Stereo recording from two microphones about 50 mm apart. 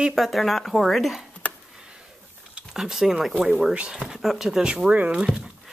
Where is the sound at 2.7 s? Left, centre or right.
Centre.